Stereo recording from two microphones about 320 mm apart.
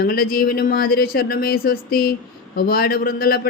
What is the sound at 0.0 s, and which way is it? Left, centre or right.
Speech, left.